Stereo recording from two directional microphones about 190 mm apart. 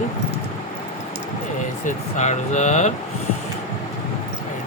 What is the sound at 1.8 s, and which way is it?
Speech, 40° left (ahead or behind).